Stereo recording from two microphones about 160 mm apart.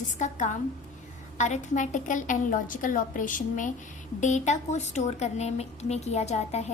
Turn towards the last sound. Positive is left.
turn(degrees=45)  # may be behind; listen again after turning